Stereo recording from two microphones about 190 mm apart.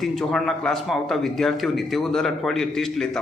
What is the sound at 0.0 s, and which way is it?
A man's voice, centre (ahead or behind).